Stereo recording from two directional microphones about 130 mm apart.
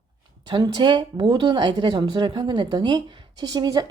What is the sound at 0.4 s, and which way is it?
Speech, 35° right (ahead or behind).